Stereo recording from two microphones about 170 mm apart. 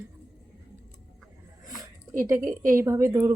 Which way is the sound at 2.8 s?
15° right (ahead or behind).